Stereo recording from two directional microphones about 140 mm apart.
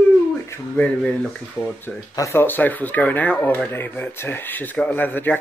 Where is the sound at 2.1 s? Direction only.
20° left (ahead or behind).